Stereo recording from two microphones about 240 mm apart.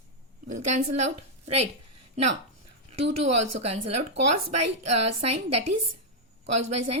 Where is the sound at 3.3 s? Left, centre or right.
Right.